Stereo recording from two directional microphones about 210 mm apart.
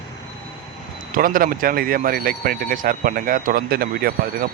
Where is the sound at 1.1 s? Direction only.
40° right (ahead or behind).